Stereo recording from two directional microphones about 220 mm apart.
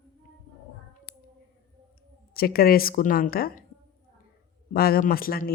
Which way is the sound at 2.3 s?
45° left (ahead or behind).